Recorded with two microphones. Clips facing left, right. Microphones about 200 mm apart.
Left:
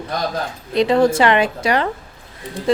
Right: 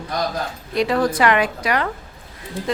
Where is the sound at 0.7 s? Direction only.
25° left (ahead or behind).